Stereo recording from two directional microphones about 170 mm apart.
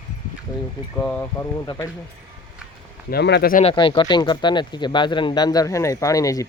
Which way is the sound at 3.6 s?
30° left (ahead or behind).